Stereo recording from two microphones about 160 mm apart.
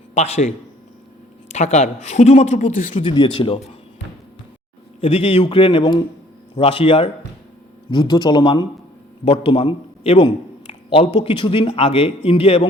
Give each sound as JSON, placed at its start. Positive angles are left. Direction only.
{"t": 0.1, "sound": "a man's voice", "side_deg": 45}
{"t": 1.5, "sound": "a woman's voice", "side_deg": 45}
{"t": 2.9, "sound": "a man's voice", "side_deg": 30}
{"t": 4.9, "sound": "a man's voice", "side_deg": 35}